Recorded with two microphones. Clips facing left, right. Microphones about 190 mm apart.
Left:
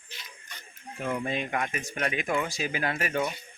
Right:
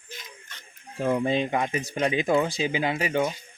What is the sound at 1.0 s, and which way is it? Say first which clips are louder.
Speech: right 7 dB; 30° right (ahead or behind).